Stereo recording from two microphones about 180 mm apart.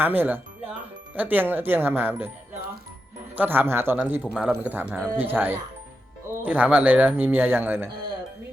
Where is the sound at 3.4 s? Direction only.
10° right (ahead or behind).